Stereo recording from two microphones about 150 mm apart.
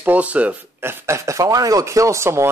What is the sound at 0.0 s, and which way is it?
Speech, 10° right (ahead or behind).